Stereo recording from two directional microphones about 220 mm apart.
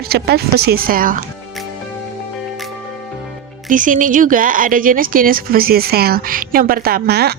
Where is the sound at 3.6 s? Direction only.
35° right (ahead or behind).